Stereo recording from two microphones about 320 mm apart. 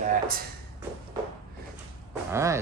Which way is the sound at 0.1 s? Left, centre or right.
Right.